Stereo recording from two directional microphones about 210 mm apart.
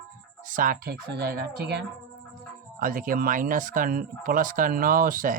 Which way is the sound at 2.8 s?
40° right (ahead or behind).